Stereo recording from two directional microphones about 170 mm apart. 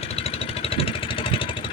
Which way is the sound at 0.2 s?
35° left (ahead or behind).